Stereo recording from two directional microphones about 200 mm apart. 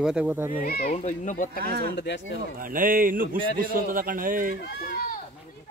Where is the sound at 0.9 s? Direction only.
40° left (ahead or behind).